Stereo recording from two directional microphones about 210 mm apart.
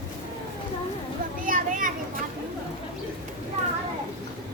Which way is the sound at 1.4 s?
40° right (ahead or behind).